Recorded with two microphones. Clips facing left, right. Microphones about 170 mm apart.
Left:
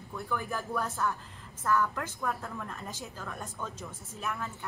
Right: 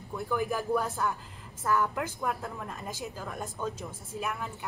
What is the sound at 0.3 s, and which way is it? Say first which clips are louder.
A woman's voice: right 6 dB; 15° right (ahead or behind).